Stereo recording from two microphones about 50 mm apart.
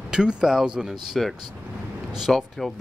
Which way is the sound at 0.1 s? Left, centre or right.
Centre.